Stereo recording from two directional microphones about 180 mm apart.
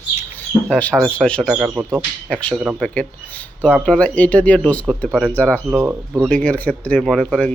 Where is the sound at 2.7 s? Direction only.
5° left (ahead or behind).